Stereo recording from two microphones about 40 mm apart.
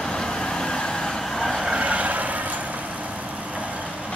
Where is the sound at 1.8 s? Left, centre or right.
Right.